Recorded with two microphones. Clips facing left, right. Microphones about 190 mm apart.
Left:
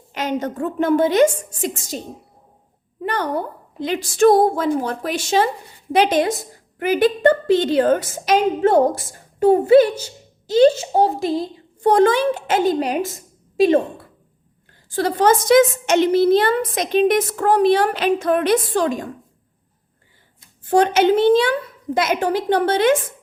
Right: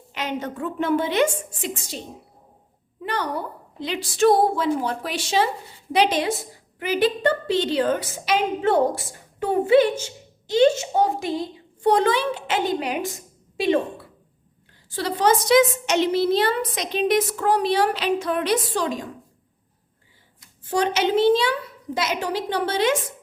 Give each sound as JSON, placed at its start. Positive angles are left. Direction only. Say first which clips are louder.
{"t": 0.1, "sound": "a woman's voice", "louder": "left 5 dB", "side_deg": 45}
{"t": 3.0, "sound": "a woman's voice", "louder": "left 4 dB", "side_deg": 50}
{"t": 20.7, "sound": "a woman's voice", "louder": "left 7 dB", "side_deg": 55}